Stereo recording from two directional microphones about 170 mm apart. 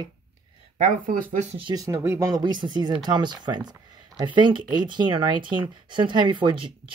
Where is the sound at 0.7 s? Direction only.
50° right (ahead or behind).